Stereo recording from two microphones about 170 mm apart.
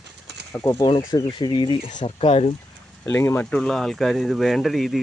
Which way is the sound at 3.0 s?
15° left (ahead or behind).